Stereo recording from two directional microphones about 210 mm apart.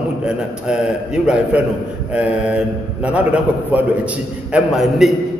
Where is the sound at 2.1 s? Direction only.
5° right (ahead or behind).